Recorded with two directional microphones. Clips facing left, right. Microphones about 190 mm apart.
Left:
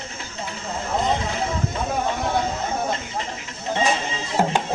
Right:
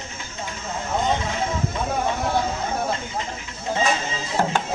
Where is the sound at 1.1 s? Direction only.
35° left (ahead or behind).